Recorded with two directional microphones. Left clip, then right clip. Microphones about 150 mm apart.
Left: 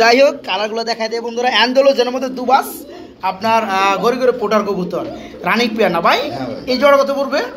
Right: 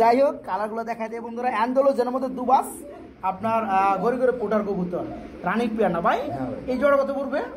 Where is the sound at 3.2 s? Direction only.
5° right (ahead or behind).